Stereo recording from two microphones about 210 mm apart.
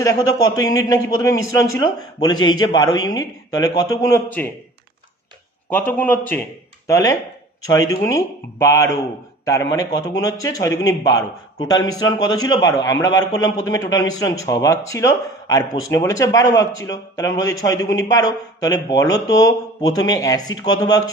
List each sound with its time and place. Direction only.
0.0 s a man's voice: 15° left (ahead or behind)
5.7 s a man's voice: 10° left (ahead or behind)